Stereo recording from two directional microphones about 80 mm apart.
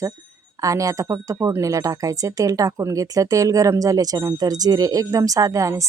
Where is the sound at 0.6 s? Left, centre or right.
Right.